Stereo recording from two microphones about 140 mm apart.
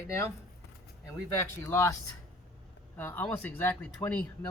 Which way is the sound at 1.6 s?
20° left (ahead or behind).